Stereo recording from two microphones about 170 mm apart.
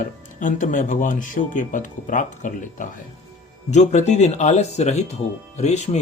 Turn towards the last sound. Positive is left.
turn(degrees=40)  # may be behind; listen again after turning